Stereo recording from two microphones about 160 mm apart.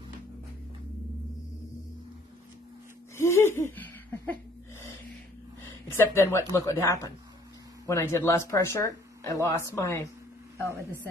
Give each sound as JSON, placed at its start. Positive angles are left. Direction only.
{"t": 3.2, "sound": "speech", "side_deg": 15}
{"t": 5.6, "sound": "speech", "side_deg": 15}